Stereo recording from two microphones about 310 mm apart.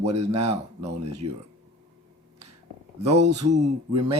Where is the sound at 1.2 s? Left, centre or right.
Right.